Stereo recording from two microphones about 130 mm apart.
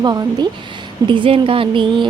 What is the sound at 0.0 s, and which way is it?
A woman's voice, 30° right (ahead or behind).